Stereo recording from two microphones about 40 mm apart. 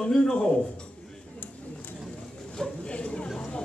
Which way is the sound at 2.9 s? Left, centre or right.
Left.